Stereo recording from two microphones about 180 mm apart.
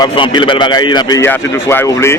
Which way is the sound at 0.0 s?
25° left (ahead or behind).